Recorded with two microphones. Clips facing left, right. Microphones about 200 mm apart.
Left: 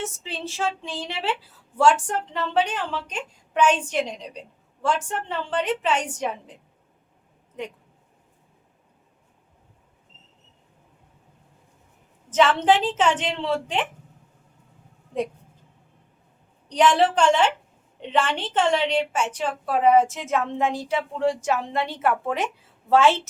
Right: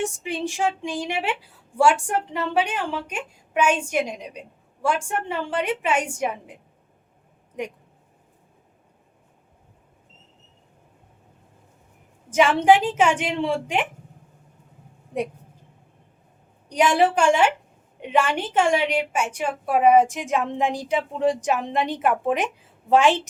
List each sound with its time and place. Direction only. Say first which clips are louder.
0.0 s a woman's voice: right 6 dB; 15° right (ahead or behind)
12.3 s a woman's voice: right 2 dB; 10° right (ahead or behind)
16.6 s a woman's voice: even; 10° right (ahead or behind)